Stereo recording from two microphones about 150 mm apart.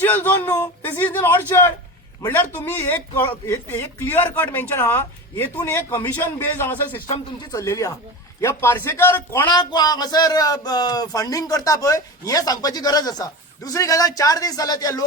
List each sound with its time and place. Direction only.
0.0 s a man's voice: 10° left (ahead or behind)
9.5 s speech: 30° left (ahead or behind)